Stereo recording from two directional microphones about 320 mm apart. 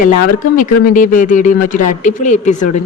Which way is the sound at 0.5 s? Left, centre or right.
Left.